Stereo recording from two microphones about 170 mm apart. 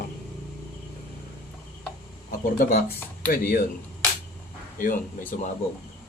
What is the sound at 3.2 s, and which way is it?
Speech, 60° left (ahead or behind).